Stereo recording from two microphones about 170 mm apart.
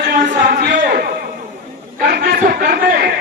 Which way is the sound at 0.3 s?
55° right (ahead or behind).